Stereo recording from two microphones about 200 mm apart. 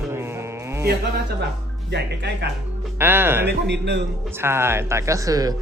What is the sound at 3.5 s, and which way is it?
Speech, 60° right (ahead or behind).